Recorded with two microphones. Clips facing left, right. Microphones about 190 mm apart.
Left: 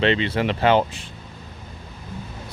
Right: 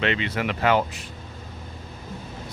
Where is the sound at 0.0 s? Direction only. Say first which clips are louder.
Left 5 dB; 30° left (ahead or behind).